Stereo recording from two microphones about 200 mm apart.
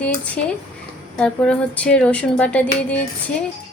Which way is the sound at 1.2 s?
5° left (ahead or behind).